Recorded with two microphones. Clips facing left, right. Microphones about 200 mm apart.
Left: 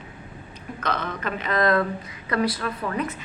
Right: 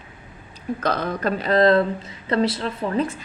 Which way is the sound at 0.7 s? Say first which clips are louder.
Right 3 dB; 35° right (ahead or behind).